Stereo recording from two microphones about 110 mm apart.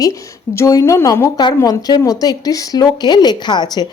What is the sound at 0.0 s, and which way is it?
A woman's voice, 30° left (ahead or behind).